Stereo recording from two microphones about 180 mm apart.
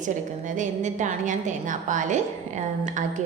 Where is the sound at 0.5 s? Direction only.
45° right (ahead or behind).